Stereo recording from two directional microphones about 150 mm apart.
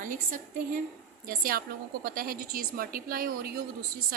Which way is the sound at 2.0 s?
75° right (ahead or behind).